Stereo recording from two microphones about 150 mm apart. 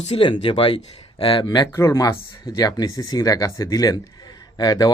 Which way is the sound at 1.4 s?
20° left (ahead or behind).